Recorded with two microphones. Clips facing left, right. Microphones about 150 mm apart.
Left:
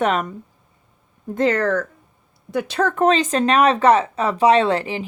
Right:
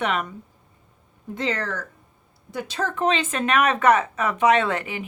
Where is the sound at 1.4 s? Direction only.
50° left (ahead or behind).